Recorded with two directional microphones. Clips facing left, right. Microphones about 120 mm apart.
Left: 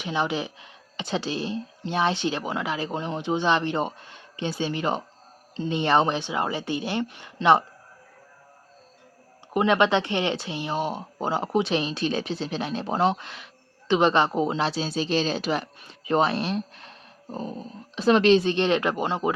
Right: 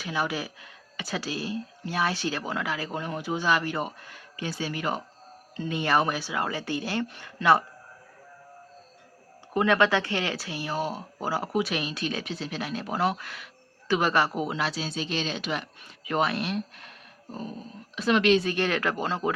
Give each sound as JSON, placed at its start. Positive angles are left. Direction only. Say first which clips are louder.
{"t": 0.0, "sound": "speech", "louder": "left 3 dB", "side_deg": 25}
{"t": 9.5, "sound": "speech", "louder": "left 2 dB", "side_deg": 20}
{"t": 17.9, "sound": "speech", "louder": "left 4 dB", "side_deg": 30}